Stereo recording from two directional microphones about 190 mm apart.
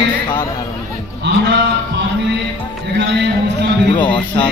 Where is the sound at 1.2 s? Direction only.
65° right (ahead or behind).